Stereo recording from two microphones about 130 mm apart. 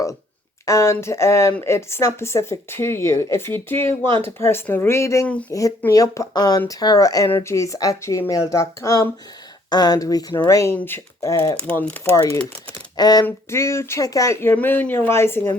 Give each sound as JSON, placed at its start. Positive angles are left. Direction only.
{"t": 0.6, "sound": "speech", "side_deg": 25}
{"t": 11.6, "sound": "speech", "side_deg": 10}
{"t": 12.1, "sound": "speech", "side_deg": 25}
{"t": 13.0, "sound": "a sound", "side_deg": 30}
{"t": 13.2, "sound": "speech", "side_deg": 20}
{"t": 14.5, "sound": "speech", "side_deg": 15}